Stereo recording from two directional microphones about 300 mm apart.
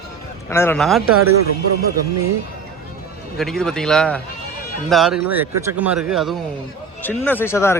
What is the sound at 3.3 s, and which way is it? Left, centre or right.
Speech, centre.